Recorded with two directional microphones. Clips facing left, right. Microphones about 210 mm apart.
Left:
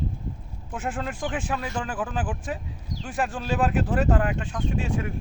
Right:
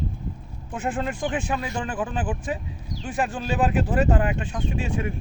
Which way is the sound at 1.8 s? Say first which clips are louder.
Right 2 dB; 5° left (ahead or behind).